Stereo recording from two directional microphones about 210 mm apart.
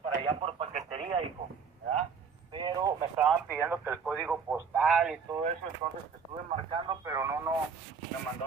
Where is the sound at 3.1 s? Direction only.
5° right (ahead or behind).